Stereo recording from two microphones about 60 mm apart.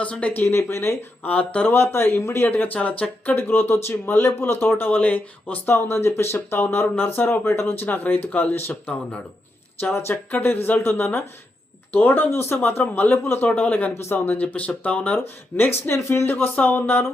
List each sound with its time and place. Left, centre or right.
0.0 s speech: left
0.4 s speech: left
1.2 s speech: left
1.7 s speech: left
3.3 s speech: left
9.9 s speech: left
13.9 s speech: left
14.3 s speech: left
15.5 s speech: left
16.0 s speech: left
16.2 s speech: left